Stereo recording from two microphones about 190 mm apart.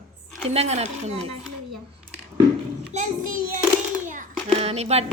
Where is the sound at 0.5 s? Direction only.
35° right (ahead or behind).